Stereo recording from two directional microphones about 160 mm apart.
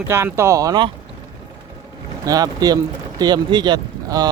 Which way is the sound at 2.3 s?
25° right (ahead or behind).